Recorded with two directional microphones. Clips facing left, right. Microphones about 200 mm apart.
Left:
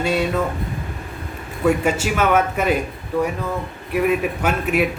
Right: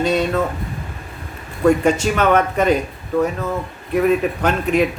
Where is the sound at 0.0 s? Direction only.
10° left (ahead or behind).